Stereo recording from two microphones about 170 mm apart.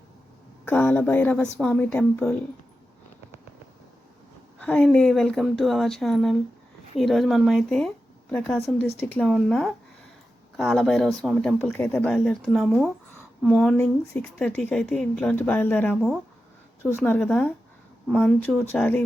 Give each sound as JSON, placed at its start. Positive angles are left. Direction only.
{"t": 0.6, "sound": "speech", "side_deg": 10}
{"t": 4.5, "sound": "a woman's voice", "side_deg": 5}
{"t": 18.7, "sound": "speech", "side_deg": 10}